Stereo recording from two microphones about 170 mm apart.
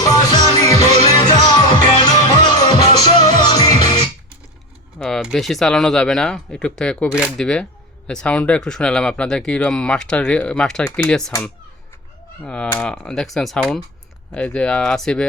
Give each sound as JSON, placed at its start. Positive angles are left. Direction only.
{"t": 0.3, "sound": "music", "side_deg": 20}
{"t": 4.9, "sound": "speech", "side_deg": 5}
{"t": 12.4, "sound": "speech", "side_deg": 5}